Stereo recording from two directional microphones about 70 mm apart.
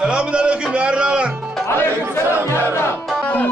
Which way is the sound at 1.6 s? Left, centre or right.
Left.